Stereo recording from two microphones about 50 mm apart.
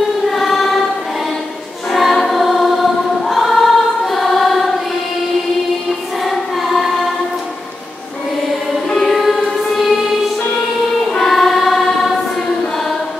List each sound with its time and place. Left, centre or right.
0.3 s choir: centre
1.9 s choir: centre
6.2 s choir: centre
8.8 s choir: centre